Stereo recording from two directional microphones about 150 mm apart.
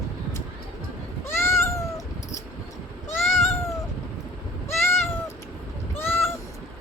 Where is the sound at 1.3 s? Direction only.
15° left (ahead or behind).